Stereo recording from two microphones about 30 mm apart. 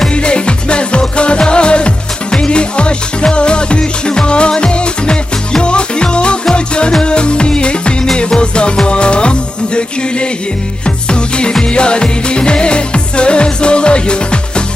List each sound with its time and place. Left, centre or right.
0.1 s music: left